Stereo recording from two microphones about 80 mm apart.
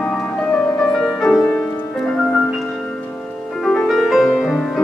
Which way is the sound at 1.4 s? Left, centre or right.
Left.